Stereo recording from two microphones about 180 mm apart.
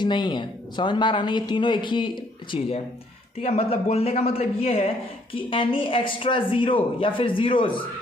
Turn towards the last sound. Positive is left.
turn(degrees=30)  # may be behind; listen again after turning